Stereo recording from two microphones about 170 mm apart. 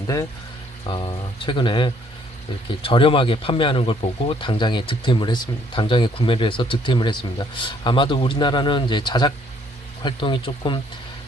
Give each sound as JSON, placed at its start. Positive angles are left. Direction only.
{"t": 0.9, "sound": "speech", "side_deg": 30}